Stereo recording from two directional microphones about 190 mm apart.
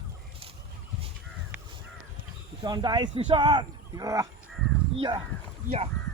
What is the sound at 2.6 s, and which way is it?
Speech, 20° right (ahead or behind).